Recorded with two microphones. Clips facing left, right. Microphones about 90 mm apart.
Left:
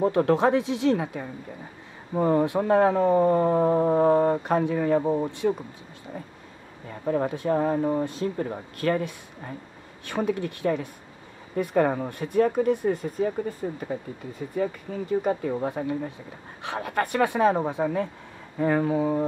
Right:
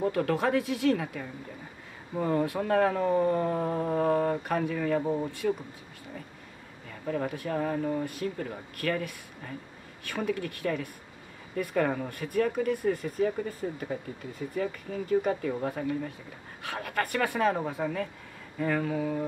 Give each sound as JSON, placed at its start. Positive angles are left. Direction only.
{"t": 0.0, "sound": "speech", "side_deg": 25}